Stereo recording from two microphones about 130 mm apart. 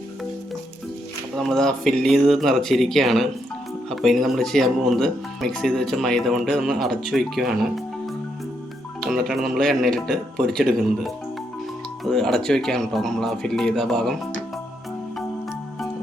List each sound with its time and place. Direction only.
1.4 s speech: centre (ahead or behind)